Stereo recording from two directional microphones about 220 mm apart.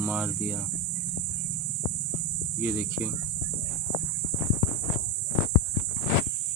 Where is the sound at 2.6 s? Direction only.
10° right (ahead or behind).